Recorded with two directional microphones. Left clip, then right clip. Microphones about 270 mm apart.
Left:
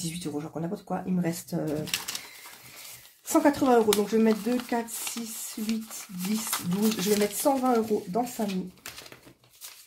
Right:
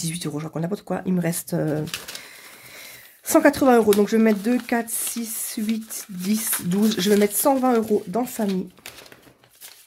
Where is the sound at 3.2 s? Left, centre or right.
Right.